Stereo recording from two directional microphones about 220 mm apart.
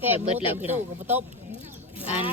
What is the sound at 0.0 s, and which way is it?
Speech, 10° right (ahead or behind).